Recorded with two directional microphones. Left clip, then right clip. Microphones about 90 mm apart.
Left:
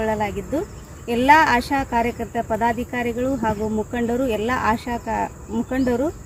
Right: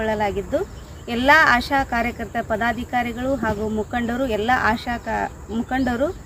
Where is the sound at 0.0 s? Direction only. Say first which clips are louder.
Right 1 dB; 40° right (ahead or behind).